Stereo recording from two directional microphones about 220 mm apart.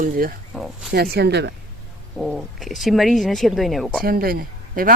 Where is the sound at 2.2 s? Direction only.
Centre (ahead or behind).